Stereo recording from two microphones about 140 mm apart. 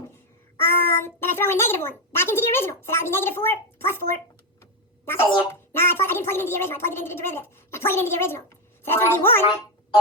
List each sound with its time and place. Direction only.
0.6 s speech: 15° left (ahead or behind)
4.6 s a sound: 15° left (ahead or behind)
5.5 s speech: 20° left (ahead or behind)